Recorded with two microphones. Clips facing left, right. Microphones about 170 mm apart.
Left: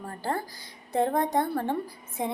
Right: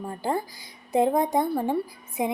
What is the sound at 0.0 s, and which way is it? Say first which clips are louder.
A woman's voice: right 4 dB; 15° right (ahead or behind).